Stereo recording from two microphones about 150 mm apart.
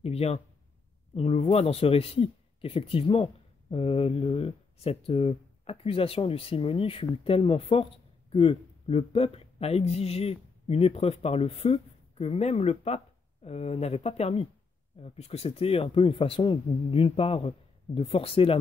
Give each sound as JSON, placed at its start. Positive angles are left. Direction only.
{"t": 0.0, "sound": "speech", "side_deg": 40}